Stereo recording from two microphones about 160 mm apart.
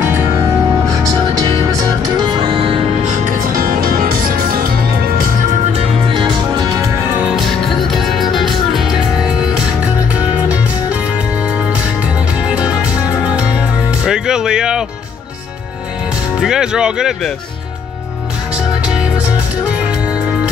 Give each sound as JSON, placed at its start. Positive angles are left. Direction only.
{"t": 1.4, "sound": "music", "side_deg": -25}
{"t": 3.0, "sound": "music", "side_deg": -50}
{"t": 6.0, "sound": "music", "side_deg": -30}
{"t": 7.2, "sound": "music", "side_deg": -5}
{"t": 12.4, "sound": "music", "side_deg": -5}
{"t": 14.0, "sound": "music", "side_deg": -5}
{"t": 16.3, "sound": "music", "side_deg": -5}
{"t": 18.9, "sound": "music", "side_deg": -5}